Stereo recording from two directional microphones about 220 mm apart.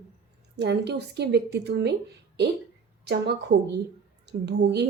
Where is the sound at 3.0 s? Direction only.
50° right (ahead or behind).